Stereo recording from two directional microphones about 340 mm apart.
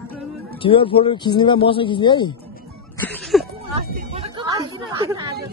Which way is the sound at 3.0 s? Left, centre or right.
Centre.